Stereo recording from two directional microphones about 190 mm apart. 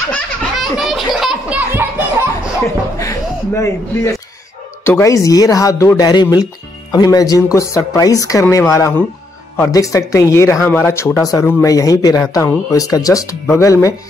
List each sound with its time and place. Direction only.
0.1 s belly laugh: centre (ahead or behind)
1.2 s music: 10° right (ahead or behind)
2.6 s speech: 15° left (ahead or behind)